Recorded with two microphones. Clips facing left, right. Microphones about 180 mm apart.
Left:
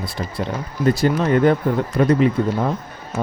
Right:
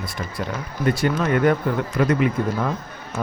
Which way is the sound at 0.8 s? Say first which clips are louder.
Left 3 dB; 30° left (ahead or behind).